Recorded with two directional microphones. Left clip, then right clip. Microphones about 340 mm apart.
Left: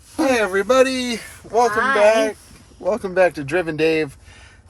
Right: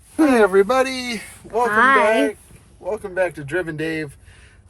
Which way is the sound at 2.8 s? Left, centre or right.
Centre.